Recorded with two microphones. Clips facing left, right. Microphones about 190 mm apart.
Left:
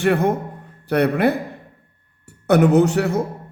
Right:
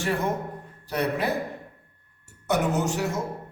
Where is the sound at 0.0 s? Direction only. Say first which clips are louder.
Left 8 dB; 60° left (ahead or behind).